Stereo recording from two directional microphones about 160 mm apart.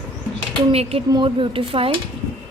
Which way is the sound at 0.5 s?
40° right (ahead or behind).